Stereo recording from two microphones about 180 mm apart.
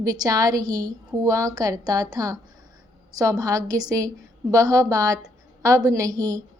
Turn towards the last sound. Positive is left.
turn(degrees=-20)  # may be behind; listen again after turning